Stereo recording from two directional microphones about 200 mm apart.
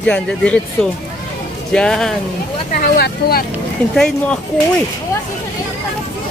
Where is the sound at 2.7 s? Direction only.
45° left (ahead or behind).